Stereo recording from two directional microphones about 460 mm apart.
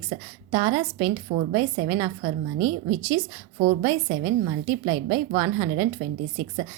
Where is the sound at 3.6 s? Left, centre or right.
Centre.